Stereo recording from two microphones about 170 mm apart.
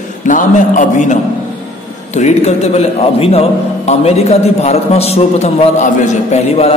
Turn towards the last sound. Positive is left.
turn(degrees=40)  # may be behind; listen again after turning